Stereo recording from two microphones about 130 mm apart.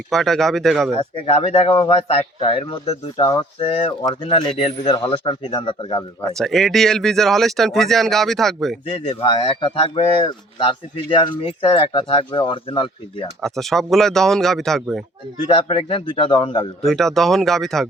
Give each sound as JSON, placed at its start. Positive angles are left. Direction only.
{"t": 0.1, "sound": "speech", "side_deg": 0}
{"t": 0.9, "sound": "speech", "side_deg": 50}
{"t": 6.3, "sound": "speech", "side_deg": 0}
{"t": 8.9, "sound": "speech", "side_deg": 45}
{"t": 13.4, "sound": "speech", "side_deg": 0}
{"t": 15.5, "sound": "speech", "side_deg": 45}
{"t": 16.8, "sound": "speech", "side_deg": 5}